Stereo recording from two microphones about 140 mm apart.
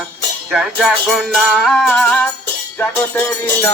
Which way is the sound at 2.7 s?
15° left (ahead or behind).